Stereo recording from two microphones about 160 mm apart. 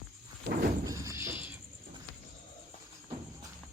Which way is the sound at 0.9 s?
20° right (ahead or behind).